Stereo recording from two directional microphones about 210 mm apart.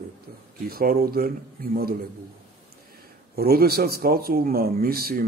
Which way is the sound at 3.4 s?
45° right (ahead or behind).